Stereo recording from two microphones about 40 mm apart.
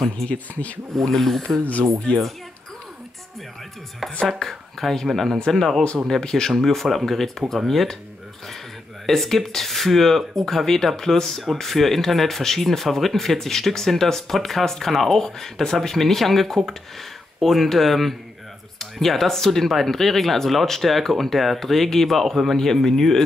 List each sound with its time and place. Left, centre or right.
0.3 s speech: left
0.9 s speech: centre
2.1 s speech: left
4.4 s speech: centre
9.0 s speech: centre